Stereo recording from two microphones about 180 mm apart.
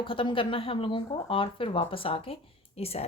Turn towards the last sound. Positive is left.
turn(degrees=35)  # may be behind; listen again after turning